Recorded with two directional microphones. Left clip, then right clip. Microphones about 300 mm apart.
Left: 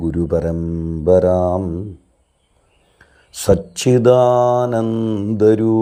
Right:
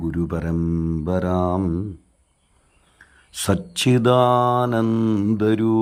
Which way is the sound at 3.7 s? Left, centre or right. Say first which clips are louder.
Left 3 dB; centre.